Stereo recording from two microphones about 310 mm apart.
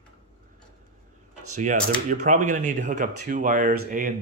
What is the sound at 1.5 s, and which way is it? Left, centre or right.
Speech, right.